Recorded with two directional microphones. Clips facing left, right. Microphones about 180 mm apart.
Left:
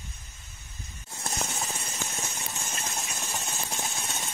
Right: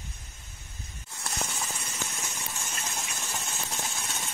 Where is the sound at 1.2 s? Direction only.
25° left (ahead or behind).